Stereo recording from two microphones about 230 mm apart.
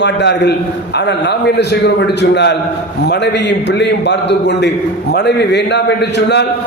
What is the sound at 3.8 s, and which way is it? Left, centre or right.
A man's voice, left.